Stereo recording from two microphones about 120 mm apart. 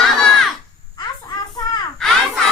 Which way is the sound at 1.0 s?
35° left (ahead or behind).